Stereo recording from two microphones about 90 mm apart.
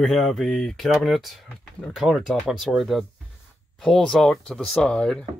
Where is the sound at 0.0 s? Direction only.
Centre (ahead or behind).